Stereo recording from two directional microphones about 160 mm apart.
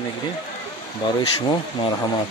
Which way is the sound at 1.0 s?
25° left (ahead or behind).